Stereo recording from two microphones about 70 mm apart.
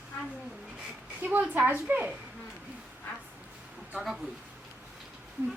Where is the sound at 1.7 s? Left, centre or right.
Right.